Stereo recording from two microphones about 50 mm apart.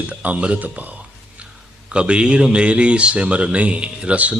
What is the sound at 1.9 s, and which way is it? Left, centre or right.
Speech, right.